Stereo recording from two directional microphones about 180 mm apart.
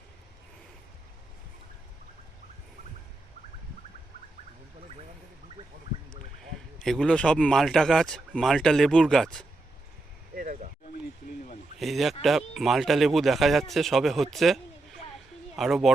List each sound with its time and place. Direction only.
6.1 s speech: centre (ahead or behind)
10.3 s a sound: 45° right (ahead or behind)
11.8 s speech: centre (ahead or behind)